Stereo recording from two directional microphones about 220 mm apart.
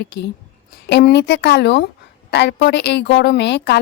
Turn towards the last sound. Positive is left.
turn(degrees=50)  # may be behind; listen again after turning